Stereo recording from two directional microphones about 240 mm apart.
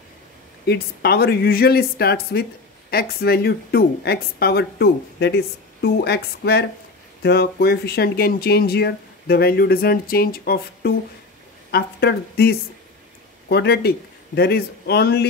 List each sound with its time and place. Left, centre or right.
0.7 s a man's voice: left